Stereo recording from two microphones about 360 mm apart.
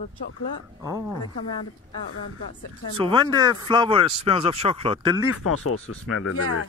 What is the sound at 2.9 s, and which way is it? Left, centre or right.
Speech, centre.